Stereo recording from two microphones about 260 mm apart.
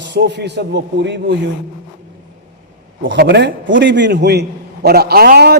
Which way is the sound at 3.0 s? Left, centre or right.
Right.